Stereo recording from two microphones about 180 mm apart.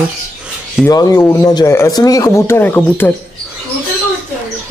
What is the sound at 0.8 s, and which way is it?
Speech, 15° left (ahead or behind).